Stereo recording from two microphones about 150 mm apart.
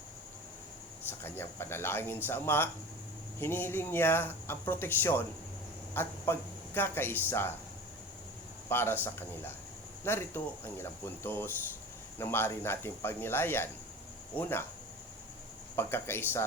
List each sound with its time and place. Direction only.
1.2 s a woman's voice: 15° left (ahead or behind)
8.7 s speech: 15° left (ahead or behind)
15.7 s speech: 15° left (ahead or behind)